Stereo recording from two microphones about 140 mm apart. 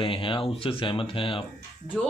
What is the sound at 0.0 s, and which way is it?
Speech, 40° left (ahead or behind).